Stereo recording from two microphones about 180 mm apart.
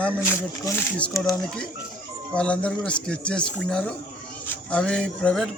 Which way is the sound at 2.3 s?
5° left (ahead or behind).